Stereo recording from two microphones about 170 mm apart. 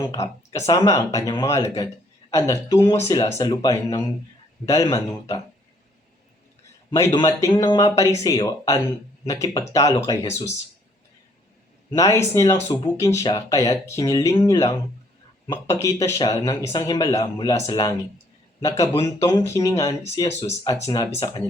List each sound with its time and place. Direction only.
0.2 s speech: 15° left (ahead or behind)
6.9 s speech: 20° left (ahead or behind)
11.9 s speech: 20° left (ahead or behind)
18.6 s speech: 15° left (ahead or behind)
20.4 s speech: 30° left (ahead or behind)
20.9 s speech: 20° left (ahead or behind)